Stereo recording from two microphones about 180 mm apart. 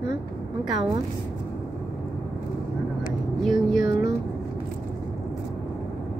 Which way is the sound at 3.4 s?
Centre (ahead or behind).